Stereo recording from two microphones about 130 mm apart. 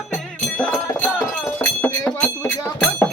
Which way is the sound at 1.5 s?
15° left (ahead or behind).